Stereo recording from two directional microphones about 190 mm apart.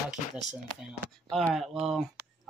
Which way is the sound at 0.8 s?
Centre (ahead or behind).